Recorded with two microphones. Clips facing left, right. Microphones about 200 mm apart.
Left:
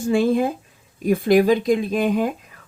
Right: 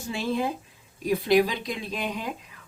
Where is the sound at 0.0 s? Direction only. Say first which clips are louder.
Left 10 dB; 50° left (ahead or behind).